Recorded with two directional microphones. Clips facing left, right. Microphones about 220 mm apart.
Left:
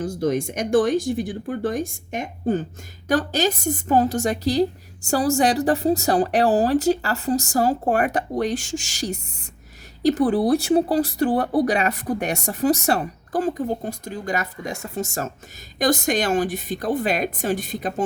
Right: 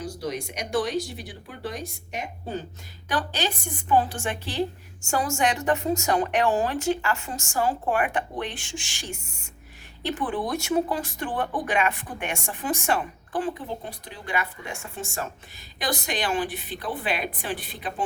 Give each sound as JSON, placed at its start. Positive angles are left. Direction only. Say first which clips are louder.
{"t": 0.0, "sound": "speech", "louder": "left 9 dB", "side_deg": 50}